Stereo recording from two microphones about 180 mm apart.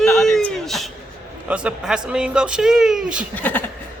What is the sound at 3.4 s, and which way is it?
Speech, 10° left (ahead or behind).